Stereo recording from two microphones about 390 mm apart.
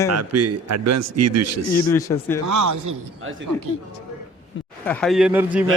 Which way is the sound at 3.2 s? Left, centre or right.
Right.